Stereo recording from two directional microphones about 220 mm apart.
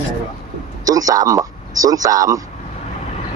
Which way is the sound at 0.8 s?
15° right (ahead or behind).